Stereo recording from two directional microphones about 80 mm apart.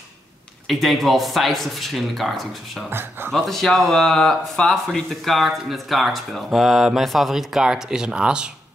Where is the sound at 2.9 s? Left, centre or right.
Right.